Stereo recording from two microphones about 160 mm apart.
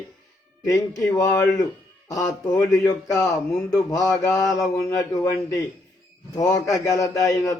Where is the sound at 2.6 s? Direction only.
25° left (ahead or behind).